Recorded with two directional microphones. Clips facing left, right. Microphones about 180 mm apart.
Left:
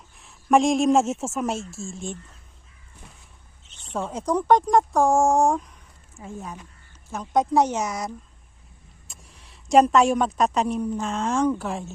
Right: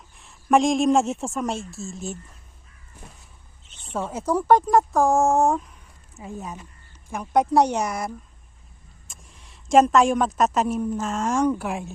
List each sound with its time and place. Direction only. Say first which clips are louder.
0.2 s speech: even; centre (ahead or behind)
3.0 s a sound: right 3 dB; 50° right (ahead or behind)
3.9 s speech: even; 5° right (ahead or behind)
6.1 s speech: right 1 dB; 15° right (ahead or behind)
9.0 s a woman's voice: even; centre (ahead or behind)